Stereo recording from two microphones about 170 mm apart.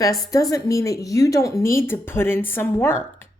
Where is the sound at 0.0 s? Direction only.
20° left (ahead or behind).